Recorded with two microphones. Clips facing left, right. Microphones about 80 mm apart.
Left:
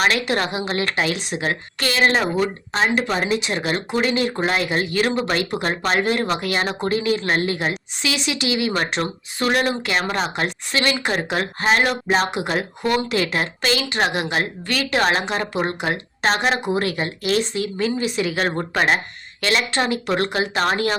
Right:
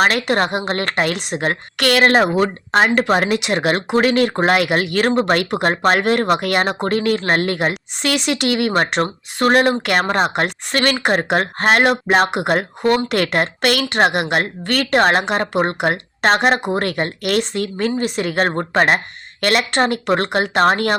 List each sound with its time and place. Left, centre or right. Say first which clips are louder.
0.0 s a woman's voice: right 4 dB; right
19.4 s speech: right 4 dB; right